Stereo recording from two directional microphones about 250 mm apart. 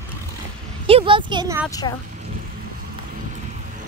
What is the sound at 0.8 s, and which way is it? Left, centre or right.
Speech, right.